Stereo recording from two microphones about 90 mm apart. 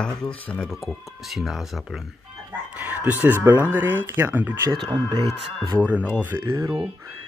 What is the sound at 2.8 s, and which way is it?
Speech, 20° right (ahead or behind).